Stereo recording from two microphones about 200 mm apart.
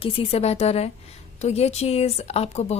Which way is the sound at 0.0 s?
30° left (ahead or behind).